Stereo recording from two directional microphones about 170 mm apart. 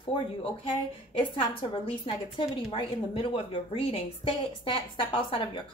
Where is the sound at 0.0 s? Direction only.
30° left (ahead or behind).